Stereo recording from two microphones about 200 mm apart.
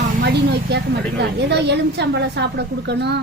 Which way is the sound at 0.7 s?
55° right (ahead or behind).